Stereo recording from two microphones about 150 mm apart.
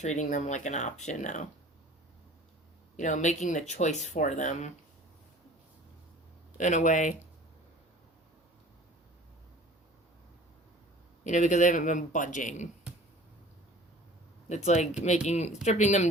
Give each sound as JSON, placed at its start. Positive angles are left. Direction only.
{"t": 0.0, "sound": "speech", "side_deg": 50}
{"t": 2.9, "sound": "speech", "side_deg": 55}
{"t": 6.6, "sound": "a man's voice", "side_deg": 55}
{"t": 11.2, "sound": "a man's voice", "side_deg": 55}
{"t": 14.5, "sound": "speech", "side_deg": 50}